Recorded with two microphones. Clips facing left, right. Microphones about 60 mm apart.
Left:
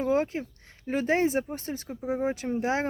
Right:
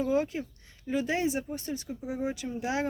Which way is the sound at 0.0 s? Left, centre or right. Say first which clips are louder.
Left 2 dB; left.